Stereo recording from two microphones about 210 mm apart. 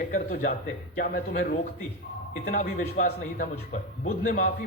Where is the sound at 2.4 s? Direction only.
45° left (ahead or behind).